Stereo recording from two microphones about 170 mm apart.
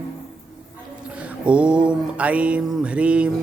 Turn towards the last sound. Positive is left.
turn(degrees=-5)  # may be behind; listen again after turning